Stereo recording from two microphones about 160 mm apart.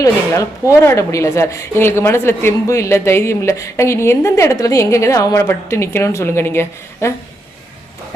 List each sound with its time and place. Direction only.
0.0 s a woman's voice: 20° left (ahead or behind)